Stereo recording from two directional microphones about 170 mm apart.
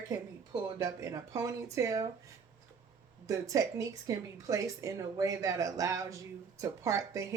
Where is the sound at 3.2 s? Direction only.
20° right (ahead or behind).